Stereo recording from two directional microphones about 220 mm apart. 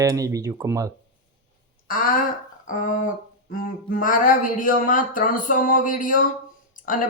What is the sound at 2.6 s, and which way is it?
Speech, 35° left (ahead or behind).